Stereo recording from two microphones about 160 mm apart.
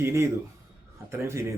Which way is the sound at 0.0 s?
15° right (ahead or behind).